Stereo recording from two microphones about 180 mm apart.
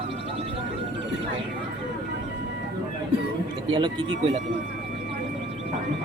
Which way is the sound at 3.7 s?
25° right (ahead or behind).